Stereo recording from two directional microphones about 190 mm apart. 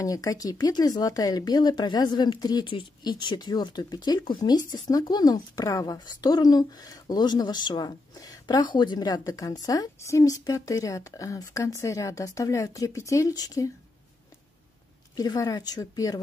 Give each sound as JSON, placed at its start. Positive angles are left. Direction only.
{"t": 0.0, "sound": "speech", "side_deg": 20}
{"t": 15.1, "sound": "speech", "side_deg": 20}